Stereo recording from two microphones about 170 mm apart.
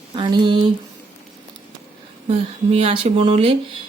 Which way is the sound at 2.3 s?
35° right (ahead or behind).